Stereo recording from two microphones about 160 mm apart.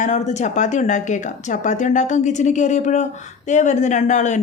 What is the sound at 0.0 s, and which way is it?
Speech, 45° left (ahead or behind).